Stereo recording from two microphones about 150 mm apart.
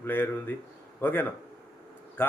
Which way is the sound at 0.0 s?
15° left (ahead or behind).